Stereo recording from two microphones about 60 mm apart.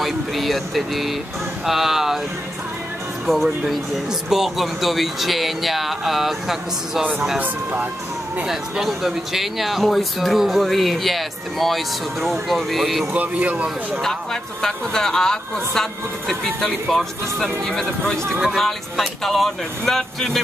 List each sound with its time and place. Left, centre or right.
0.0 s speech: centre
3.3 s speech: centre
7.3 s speech: right
8.5 s speech: centre
13.1 s speech: right
14.0 s speech: centre